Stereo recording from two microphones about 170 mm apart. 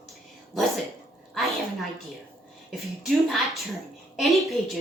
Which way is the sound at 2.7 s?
Centre (ahead or behind).